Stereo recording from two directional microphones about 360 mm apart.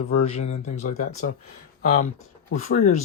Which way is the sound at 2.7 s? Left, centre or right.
Left.